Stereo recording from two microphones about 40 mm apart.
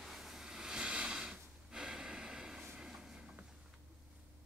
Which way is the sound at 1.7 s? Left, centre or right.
Centre.